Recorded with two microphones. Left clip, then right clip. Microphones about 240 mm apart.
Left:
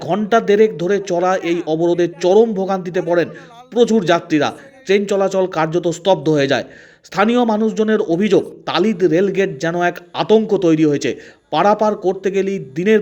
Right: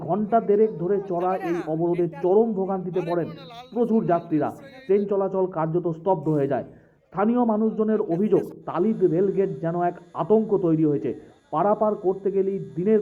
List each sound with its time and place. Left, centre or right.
0.1 s a man's voice: left